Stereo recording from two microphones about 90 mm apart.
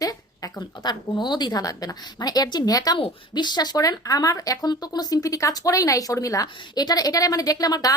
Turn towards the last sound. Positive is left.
turn(degrees=45)  # may be behind; listen again after turning